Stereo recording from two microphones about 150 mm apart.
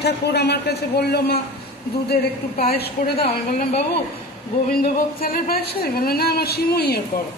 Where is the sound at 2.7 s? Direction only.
90° left.